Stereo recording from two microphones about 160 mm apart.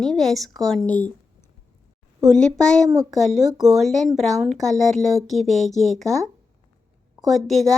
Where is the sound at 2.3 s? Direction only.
5° left (ahead or behind).